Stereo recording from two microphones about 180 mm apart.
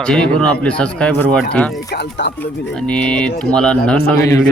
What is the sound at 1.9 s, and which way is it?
Speech, 70° left (ahead or behind).